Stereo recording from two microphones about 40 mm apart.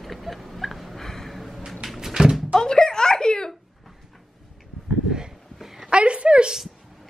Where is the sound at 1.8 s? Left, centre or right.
Centre.